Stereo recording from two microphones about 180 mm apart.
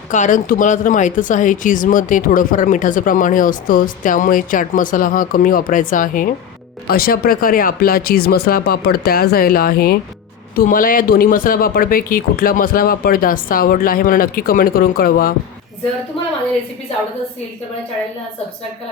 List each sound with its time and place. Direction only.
0.1 s speech: 45° left (ahead or behind)